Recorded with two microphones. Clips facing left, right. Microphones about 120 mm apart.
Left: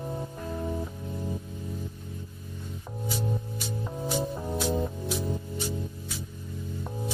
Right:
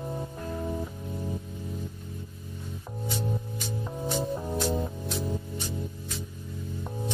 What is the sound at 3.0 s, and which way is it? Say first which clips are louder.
Music: even; 5° left (ahead or behind).